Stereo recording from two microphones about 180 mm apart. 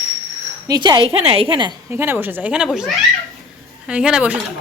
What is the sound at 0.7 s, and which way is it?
A woman's voice, 25° right (ahead or behind).